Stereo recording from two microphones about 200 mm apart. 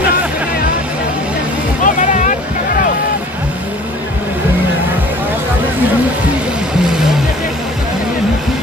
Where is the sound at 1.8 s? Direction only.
40° left (ahead or behind).